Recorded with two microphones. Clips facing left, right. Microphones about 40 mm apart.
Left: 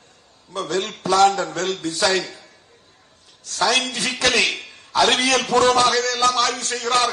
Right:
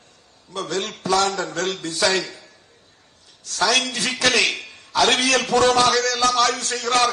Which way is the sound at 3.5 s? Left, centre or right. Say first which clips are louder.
Even; left.